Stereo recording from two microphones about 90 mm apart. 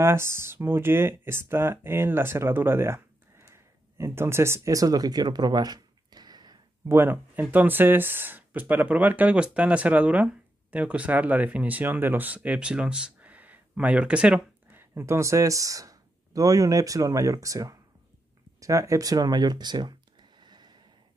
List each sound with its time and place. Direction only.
0.0 s speech: 30° right (ahead or behind); by 6.6 s 50° right (ahead or behind)
6.9 s speech: 25° right (ahead or behind)
12.4 s speech: 10° right (ahead or behind)
14.8 s speech: 30° right (ahead or behind); by 20.7 s 55° right (ahead or behind)